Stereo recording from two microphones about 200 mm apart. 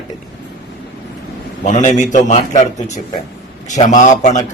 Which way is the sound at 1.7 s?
35° left (ahead or behind).